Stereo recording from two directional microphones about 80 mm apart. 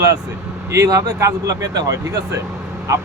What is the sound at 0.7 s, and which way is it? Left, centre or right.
Speech, right.